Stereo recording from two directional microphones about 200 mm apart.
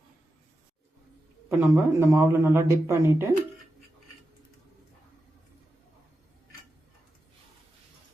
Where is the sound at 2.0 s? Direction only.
15° right (ahead or behind).